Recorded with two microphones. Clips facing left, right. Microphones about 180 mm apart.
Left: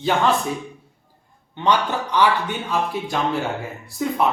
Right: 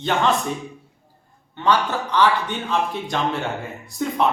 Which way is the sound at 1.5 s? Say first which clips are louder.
Even; 15° left (ahead or behind).